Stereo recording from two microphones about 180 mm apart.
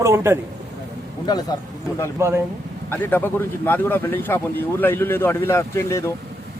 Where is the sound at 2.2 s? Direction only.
15° right (ahead or behind).